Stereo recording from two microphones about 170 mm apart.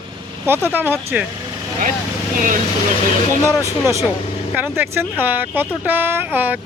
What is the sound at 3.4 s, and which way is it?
Speech, 15° left (ahead or behind).